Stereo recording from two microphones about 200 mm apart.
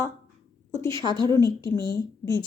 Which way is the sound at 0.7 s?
15° left (ahead or behind).